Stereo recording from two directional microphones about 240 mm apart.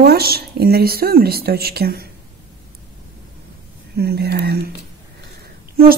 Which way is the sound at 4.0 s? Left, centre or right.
Right.